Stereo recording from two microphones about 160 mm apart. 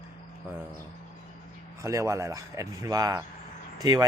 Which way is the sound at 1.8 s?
20° right (ahead or behind).